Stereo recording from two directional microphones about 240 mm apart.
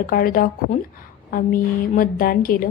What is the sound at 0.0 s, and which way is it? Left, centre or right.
A woman's voice, left.